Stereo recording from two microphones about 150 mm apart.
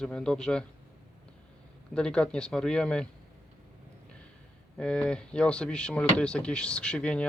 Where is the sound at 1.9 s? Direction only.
5° left (ahead or behind).